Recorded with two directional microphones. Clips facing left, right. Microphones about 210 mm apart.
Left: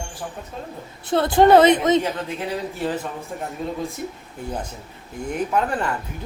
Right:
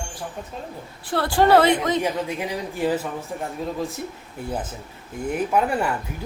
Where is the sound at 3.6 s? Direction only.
Centre (ahead or behind).